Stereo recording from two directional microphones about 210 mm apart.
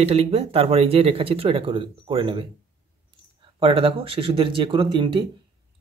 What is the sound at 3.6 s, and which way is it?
Speech, 25° right (ahead or behind).